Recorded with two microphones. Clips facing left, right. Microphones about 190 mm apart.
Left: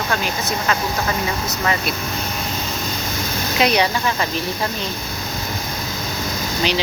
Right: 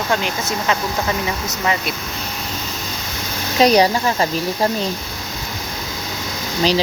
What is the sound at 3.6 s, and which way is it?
Speech, 40° right (ahead or behind).